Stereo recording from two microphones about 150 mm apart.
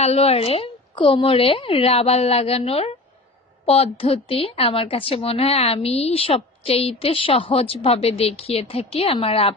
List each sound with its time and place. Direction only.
0.0 s a woman's voice: 45° left (ahead or behind)